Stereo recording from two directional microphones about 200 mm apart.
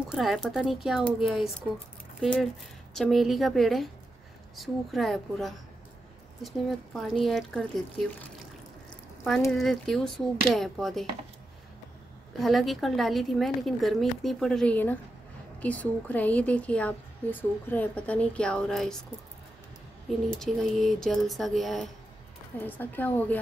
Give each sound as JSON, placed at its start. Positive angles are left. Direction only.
{"t": 0.1, "sound": "a woman's voice", "side_deg": 0}
{"t": 2.9, "sound": "a woman's voice", "side_deg": 0}
{"t": 9.5, "sound": "a woman's voice", "side_deg": 0}
{"t": 12.4, "sound": "a woman's voice", "side_deg": 0}
{"t": 20.2, "sound": "a woman's voice", "side_deg": 0}